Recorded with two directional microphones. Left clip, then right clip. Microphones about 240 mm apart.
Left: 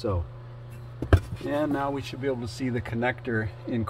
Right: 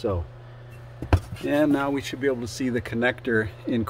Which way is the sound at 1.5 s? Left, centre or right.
Right.